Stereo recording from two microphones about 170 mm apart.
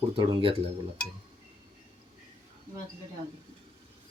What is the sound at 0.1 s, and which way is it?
Speech, 30° right (ahead or behind).